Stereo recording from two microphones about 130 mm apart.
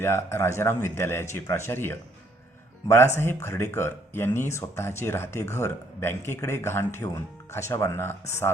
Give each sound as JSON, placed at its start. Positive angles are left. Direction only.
{"t": 0.0, "sound": "speech", "side_deg": 20}